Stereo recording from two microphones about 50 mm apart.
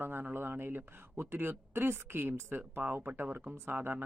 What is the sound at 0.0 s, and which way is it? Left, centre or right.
Speech, right.